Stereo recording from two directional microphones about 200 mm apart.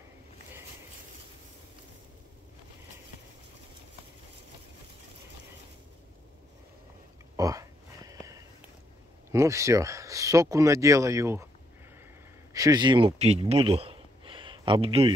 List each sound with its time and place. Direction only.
7.3 s a sound: 15° right (ahead or behind)
9.3 s speech: 15° right (ahead or behind)
12.5 s speech: 20° right (ahead or behind)